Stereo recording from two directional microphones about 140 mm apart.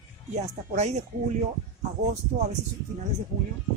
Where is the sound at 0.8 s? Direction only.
55° right (ahead or behind).